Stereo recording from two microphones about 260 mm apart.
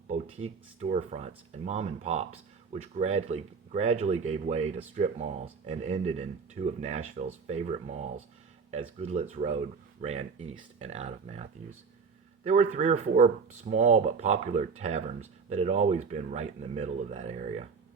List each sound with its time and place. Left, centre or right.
0.1 s speech: right
12.7 s speech: right